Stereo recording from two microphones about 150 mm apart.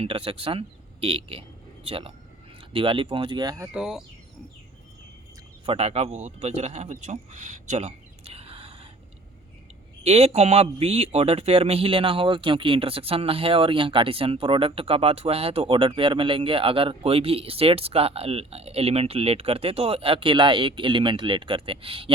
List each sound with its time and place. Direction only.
0.0 s speech: 35° right (ahead or behind)
3.7 s speech: 5° right (ahead or behind)
5.6 s speech: 45° right (ahead or behind)
10.0 s speech: 45° right (ahead or behind)